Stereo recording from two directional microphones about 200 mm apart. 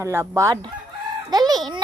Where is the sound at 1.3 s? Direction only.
20° right (ahead or behind).